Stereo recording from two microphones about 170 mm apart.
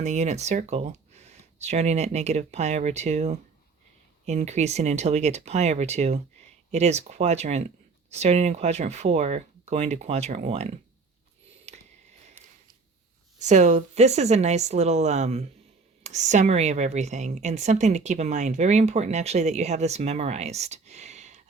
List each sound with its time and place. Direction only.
0.0 s a woman's voice: 40° right (ahead or behind)
11.7 s a sound: 40° right (ahead or behind)
13.4 s a woman's voice: 45° right (ahead or behind)